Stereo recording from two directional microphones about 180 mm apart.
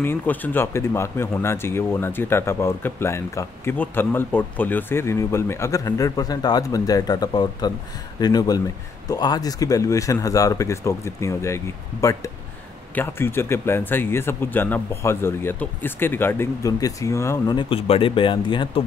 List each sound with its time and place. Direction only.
0.0 s speech: 10° left (ahead or behind); by 18.7 s 30° left (ahead or behind)